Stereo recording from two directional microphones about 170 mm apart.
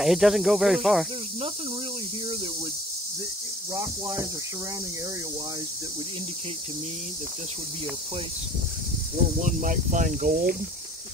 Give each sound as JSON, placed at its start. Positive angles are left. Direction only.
{"t": 0.0, "sound": "speech", "side_deg": 0}
{"t": 3.7, "sound": "speech", "side_deg": -20}
{"t": 9.4, "sound": "speech", "side_deg": -50}